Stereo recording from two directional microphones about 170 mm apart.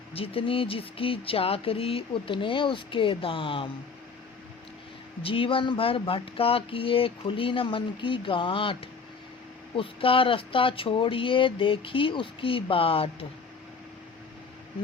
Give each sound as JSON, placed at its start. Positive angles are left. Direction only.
{"t": 0.1, "sound": "speech", "side_deg": 35}
{"t": 5.2, "sound": "speech", "side_deg": 30}